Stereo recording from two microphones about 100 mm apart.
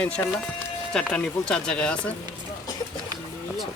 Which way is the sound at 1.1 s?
10° left (ahead or behind).